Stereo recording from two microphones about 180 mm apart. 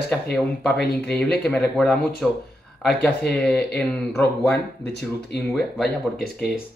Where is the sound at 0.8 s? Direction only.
65° left (ahead or behind).